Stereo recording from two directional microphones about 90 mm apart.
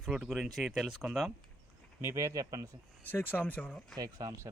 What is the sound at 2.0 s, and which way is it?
Speech, 35° right (ahead or behind).